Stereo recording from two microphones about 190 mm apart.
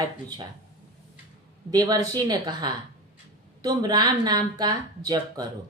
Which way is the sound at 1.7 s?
20° right (ahead or behind).